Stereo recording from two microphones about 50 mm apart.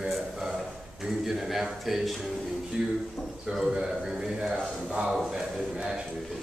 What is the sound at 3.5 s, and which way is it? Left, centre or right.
Speech, centre.